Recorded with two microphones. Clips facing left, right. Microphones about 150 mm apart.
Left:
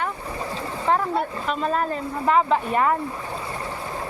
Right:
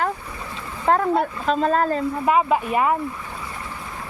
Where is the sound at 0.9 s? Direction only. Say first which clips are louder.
Right 3 dB; 45° right (ahead or behind).